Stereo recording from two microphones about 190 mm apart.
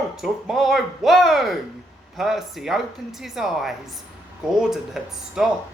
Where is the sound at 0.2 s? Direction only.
Centre (ahead or behind).